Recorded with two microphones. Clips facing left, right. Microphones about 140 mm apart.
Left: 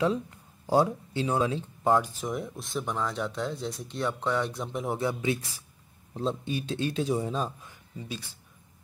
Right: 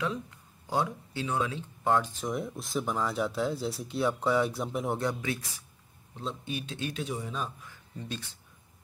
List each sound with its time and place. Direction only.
0.7 s speech: 30° left (ahead or behind)
1.9 s speech: 10° left (ahead or behind)
6.1 s speech: 30° left (ahead or behind)
7.9 s speech: 5° left (ahead or behind)